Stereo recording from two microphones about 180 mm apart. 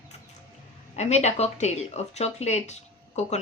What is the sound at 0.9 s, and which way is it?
Speech, 40° left (ahead or behind).